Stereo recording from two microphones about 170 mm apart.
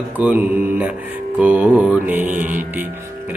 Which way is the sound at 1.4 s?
10° right (ahead or behind).